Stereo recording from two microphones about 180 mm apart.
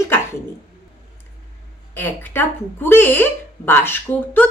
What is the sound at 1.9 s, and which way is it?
Speech, 10° left (ahead or behind).